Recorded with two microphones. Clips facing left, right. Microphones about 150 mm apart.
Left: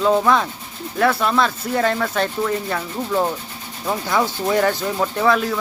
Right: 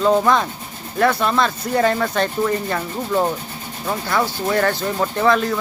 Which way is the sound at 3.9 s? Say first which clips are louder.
Left 1 dB; 15° left (ahead or behind).